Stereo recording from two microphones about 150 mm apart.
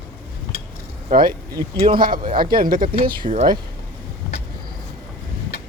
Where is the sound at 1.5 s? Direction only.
35° right (ahead or behind).